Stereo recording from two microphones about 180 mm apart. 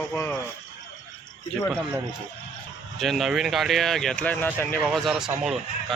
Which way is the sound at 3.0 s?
Centre (ahead or behind).